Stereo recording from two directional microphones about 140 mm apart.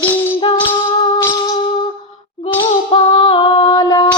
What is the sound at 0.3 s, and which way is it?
Music, 40° left (ahead or behind).